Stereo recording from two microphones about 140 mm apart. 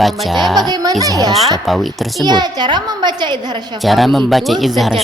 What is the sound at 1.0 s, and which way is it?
A woman's voice, 25° right (ahead or behind).